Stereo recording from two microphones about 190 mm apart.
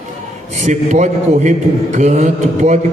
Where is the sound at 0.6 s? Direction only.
40° right (ahead or behind).